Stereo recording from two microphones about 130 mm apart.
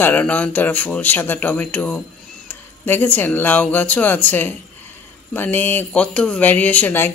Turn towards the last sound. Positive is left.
turn(degrees=15)  # may be behind; listen again after turning